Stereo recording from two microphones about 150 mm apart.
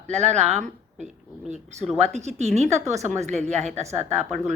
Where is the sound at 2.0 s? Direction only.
50° right (ahead or behind).